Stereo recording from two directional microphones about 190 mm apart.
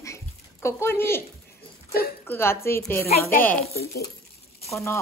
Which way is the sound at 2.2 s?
10° left (ahead or behind).